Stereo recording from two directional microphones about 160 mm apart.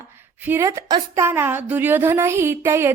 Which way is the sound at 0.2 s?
15° right (ahead or behind).